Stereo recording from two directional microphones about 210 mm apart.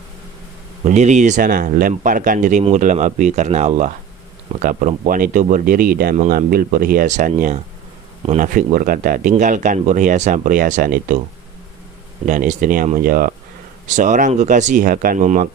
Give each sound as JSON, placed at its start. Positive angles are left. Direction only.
{"t": 0.9, "sound": "speech", "side_deg": -35}
{"t": 12.2, "sound": "speech", "side_deg": -40}